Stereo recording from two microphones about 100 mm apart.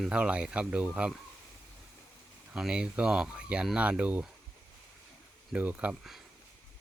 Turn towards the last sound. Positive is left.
turn(degrees=-15)  # may be behind; listen again after turning